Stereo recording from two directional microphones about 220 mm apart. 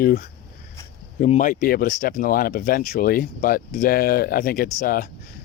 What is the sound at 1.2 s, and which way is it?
Speech, 35° left (ahead or behind).